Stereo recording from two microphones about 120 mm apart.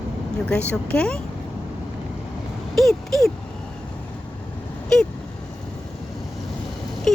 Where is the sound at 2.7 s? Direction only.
5° left (ahead or behind).